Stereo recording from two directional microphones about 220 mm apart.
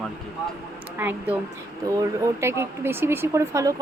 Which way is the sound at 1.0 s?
10° right (ahead or behind).